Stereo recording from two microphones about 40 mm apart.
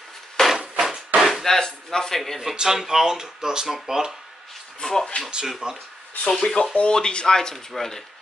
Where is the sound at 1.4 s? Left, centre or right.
Centre.